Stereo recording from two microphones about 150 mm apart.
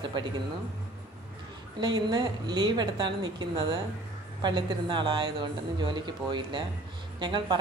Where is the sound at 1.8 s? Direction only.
25° right (ahead or behind).